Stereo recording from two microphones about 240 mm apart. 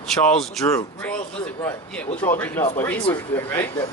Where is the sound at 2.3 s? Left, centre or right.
Centre.